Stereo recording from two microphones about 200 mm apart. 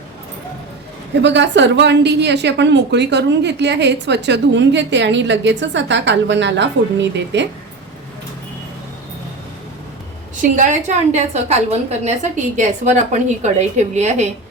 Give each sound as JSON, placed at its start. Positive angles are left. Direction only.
{"t": 1.2, "sound": "a woman's voice", "side_deg": -65}
{"t": 10.5, "sound": "a woman's voice", "side_deg": -40}